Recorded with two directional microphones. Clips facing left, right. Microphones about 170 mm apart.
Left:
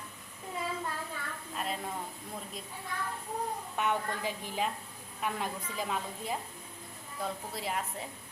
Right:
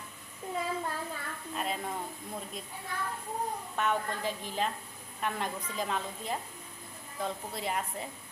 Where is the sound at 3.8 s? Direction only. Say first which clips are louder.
Right 1 dB; 15° left (ahead or behind).